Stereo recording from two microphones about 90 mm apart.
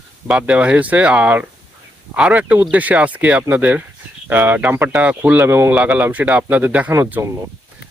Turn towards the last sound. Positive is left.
turn(degrees=-25)  # may be behind; listen again after turning